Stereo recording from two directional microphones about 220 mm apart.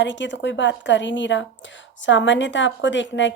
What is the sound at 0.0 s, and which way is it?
A woman's voice, 55° left (ahead or behind).